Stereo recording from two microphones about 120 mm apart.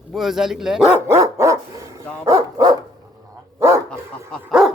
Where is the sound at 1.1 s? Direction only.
25° right (ahead or behind).